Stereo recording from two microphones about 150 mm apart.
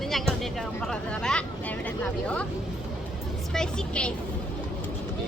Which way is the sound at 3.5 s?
5° left (ahead or behind).